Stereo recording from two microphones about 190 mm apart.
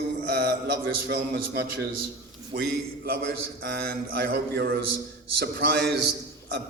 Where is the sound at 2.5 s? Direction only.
60° right (ahead or behind).